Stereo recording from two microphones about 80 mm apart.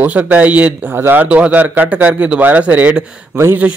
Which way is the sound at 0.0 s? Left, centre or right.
Right.